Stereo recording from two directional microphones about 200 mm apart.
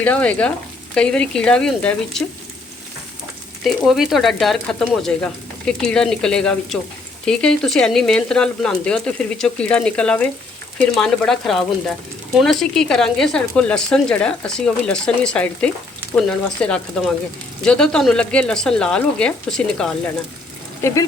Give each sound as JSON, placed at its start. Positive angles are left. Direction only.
{"t": 0.0, "sound": "frying", "side_deg": 5}
{"t": 0.9, "sound": "speech", "side_deg": 5}
{"t": 3.6, "sound": "speech", "side_deg": 0}
{"t": 20.8, "sound": "frying", "side_deg": 15}